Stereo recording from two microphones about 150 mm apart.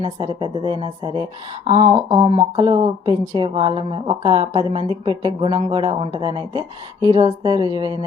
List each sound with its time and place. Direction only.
0.0 s a woman's voice: 30° right (ahead or behind)